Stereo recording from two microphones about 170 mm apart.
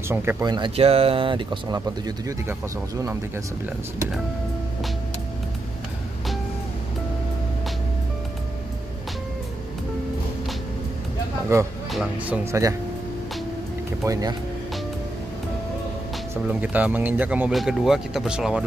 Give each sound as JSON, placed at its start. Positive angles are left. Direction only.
{"t": 0.1, "sound": "speech", "side_deg": -15}
{"t": 0.5, "sound": "speech", "side_deg": -30}
{"t": 11.5, "sound": "speech", "side_deg": -20}
{"t": 11.9, "sound": "speech", "side_deg": 0}
{"t": 12.4, "sound": "speech", "side_deg": -15}
{"t": 14.0, "sound": "speech", "side_deg": -20}
{"t": 16.4, "sound": "speech", "side_deg": -10}